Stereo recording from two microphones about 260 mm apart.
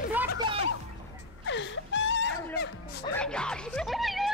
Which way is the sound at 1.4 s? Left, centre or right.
Left.